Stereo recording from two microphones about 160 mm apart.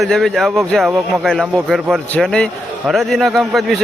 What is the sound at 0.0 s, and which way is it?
A man's voice, 5° left (ahead or behind).